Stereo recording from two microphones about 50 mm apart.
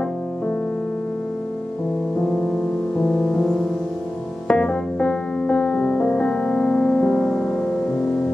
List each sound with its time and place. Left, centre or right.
2.1 s music: centre
4.5 s piano: centre